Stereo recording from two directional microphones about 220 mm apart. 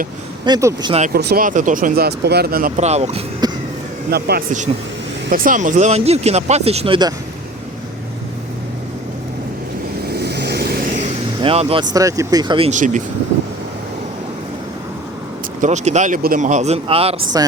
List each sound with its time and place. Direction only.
0.4 s speech: 20° right (ahead or behind)
1.0 s speech: 45° right (ahead or behind); by 3.5 s 25° right (ahead or behind)
4.1 s speech: 45° right (ahead or behind); by 7.1 s 25° right (ahead or behind)
10.1 s vehicle: 50° right (ahead or behind)
11.3 s speech: 25° right (ahead or behind)
15.6 s speech: 30° right (ahead or behind)